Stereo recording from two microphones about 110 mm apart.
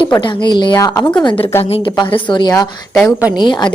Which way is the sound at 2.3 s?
40° left (ahead or behind).